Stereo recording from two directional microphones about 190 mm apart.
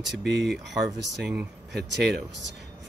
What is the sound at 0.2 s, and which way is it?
Speech, 65° right (ahead or behind).